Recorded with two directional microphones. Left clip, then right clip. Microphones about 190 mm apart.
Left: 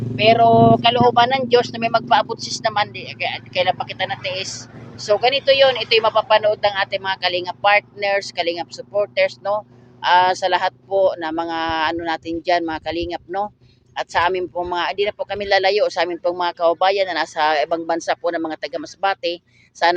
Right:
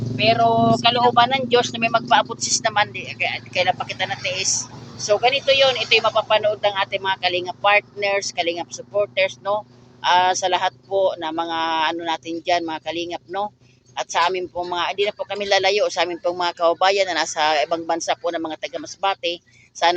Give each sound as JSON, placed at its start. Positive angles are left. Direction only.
{"t": 0.2, "sound": "speech", "side_deg": 35}